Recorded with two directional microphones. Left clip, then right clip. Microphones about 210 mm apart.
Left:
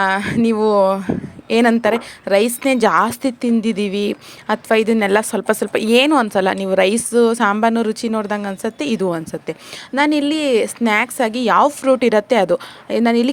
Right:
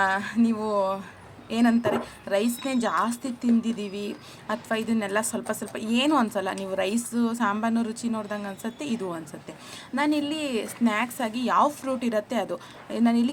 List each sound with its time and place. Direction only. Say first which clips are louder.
0.0 s speech: left 7 dB; 40° left (ahead or behind)